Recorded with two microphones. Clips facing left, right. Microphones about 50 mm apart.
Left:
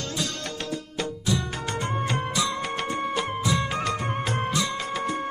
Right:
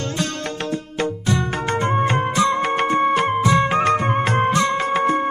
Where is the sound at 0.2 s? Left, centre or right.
Right.